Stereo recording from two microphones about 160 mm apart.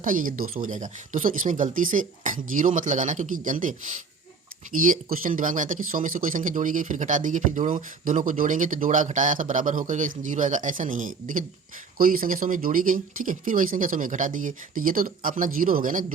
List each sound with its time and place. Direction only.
0.0 s speech: 55° right (ahead or behind)
4.9 s speech: 60° right (ahead or behind)